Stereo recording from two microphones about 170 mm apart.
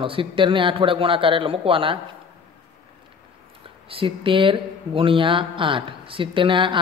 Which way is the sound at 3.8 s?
35° right (ahead or behind).